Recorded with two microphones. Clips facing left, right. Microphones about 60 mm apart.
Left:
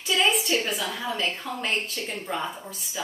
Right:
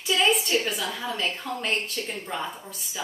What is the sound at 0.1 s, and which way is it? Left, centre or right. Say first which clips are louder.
A woman's voice: right 1 dB; centre.